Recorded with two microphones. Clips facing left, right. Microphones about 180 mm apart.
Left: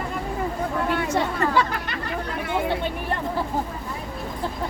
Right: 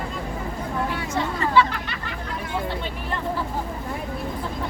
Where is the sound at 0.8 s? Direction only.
65° left (ahead or behind).